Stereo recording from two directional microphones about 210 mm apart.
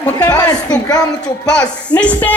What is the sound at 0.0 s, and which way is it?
A woman's voice, 15° left (ahead or behind).